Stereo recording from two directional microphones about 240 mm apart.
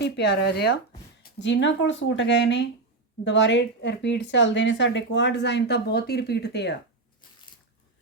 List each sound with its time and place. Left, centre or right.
0.4 s speech: left